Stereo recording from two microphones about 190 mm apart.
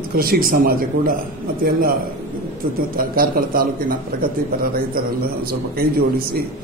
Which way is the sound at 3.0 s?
50° right (ahead or behind).